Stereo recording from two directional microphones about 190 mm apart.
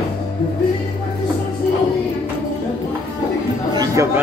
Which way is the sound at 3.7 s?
20° right (ahead or behind).